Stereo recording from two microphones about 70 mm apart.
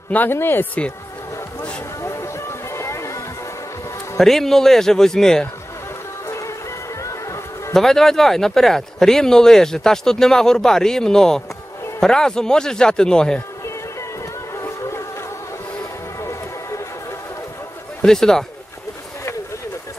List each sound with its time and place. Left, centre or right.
0.1 s speech: left
2.0 s music: left
4.2 s speech: centre
6.2 s music: left
7.7 s speech: centre
14.5 s boat: left
15.8 s music: left
18.0 s speech: centre